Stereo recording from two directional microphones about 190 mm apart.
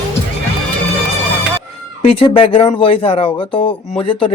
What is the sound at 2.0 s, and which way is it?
Speech, 30° left (ahead or behind).